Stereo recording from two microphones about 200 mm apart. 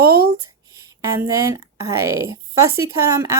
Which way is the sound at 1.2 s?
15° right (ahead or behind).